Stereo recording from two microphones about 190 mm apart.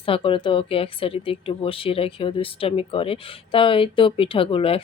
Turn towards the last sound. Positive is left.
turn(degrees=30)  # may be behind; listen again after turning